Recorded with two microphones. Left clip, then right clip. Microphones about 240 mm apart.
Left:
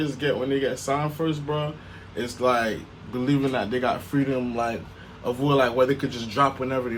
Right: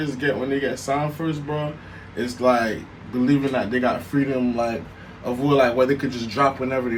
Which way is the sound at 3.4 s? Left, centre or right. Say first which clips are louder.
Right 2 dB; left.